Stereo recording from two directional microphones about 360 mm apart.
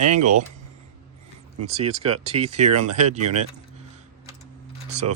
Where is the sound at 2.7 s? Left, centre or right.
Right.